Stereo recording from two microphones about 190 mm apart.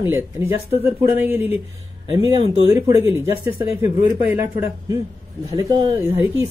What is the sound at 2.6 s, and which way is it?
Speech, 15° right (ahead or behind).